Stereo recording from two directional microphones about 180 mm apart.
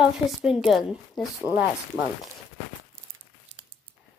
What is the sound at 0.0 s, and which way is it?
A woman's voice, 5° right (ahead or behind).